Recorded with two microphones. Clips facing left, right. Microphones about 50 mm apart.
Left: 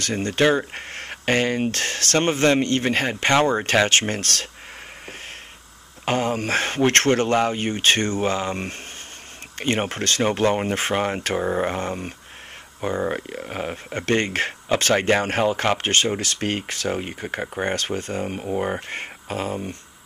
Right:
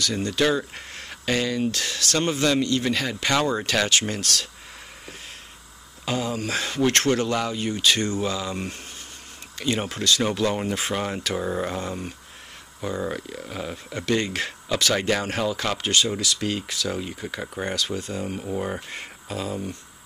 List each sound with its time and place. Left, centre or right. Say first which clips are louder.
0.0 s speech: left 3 dB; left
6.0 s speech: left 4 dB; left